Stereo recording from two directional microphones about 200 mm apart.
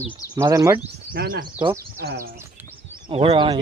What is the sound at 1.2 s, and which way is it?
Speech, 50° right (ahead or behind).